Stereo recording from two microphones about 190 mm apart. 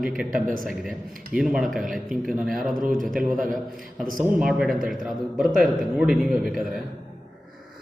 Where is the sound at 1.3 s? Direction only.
5° right (ahead or behind).